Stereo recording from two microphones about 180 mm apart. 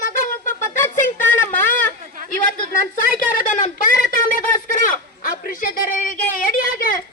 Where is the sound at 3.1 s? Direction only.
50° left (ahead or behind).